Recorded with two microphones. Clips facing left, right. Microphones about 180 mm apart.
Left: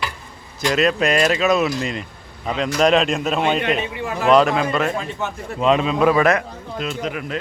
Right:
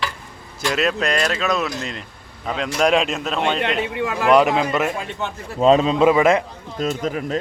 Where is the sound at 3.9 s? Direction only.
70° right (ahead or behind).